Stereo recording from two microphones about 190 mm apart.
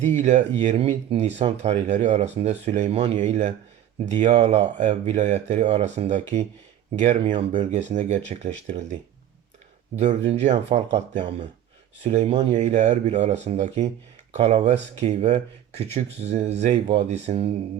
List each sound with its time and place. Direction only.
0.0 s speech: 40° right (ahead or behind)
7.5 s speech: 35° right (ahead or behind)